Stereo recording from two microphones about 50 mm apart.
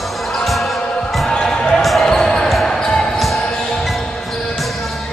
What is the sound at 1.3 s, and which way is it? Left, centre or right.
Basketball bounce, centre.